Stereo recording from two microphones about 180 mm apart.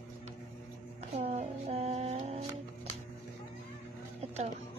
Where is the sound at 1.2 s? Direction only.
35° right (ahead or behind).